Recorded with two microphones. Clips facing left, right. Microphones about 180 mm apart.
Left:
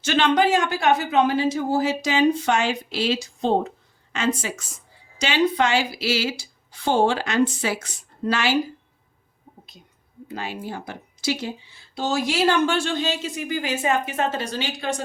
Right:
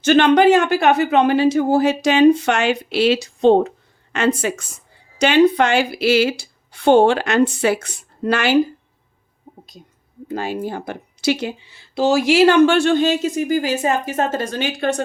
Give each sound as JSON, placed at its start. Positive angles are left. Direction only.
{"t": 0.0, "sound": "speech", "side_deg": -55}
{"t": 10.2, "sound": "speech", "side_deg": -45}